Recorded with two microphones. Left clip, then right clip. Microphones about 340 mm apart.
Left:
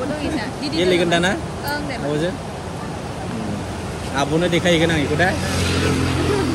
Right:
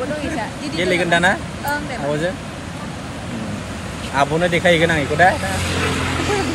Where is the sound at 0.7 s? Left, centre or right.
Centre.